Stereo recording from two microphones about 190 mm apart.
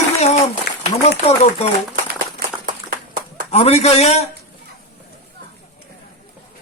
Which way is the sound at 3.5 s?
35° left (ahead or behind).